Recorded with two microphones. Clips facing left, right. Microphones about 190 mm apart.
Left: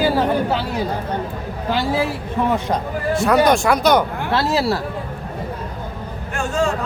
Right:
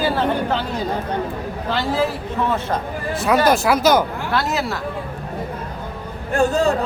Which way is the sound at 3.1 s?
Centre (ahead or behind).